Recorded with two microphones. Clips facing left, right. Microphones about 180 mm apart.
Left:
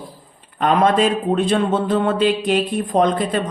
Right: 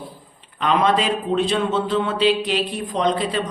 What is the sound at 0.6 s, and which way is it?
A man's voice, 50° left (ahead or behind).